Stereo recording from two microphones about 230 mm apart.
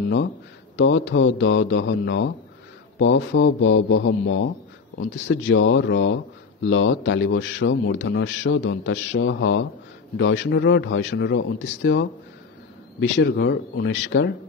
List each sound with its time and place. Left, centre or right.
0.7 s speech: left